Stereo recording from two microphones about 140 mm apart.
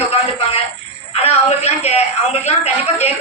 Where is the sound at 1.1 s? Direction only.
50° left (ahead or behind).